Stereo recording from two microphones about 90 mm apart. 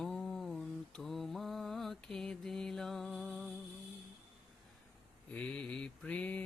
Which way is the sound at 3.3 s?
Centre (ahead or behind).